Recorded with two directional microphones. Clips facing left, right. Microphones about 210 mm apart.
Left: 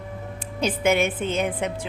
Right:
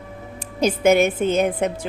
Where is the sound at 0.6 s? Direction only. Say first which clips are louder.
Right 5 dB; 40° right (ahead or behind).